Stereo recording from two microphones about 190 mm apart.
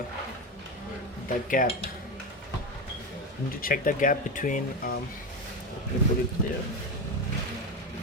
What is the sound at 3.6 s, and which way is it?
Speech, 45° left (ahead or behind).